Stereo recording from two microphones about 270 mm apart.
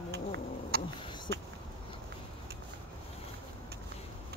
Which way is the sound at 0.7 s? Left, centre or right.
Right.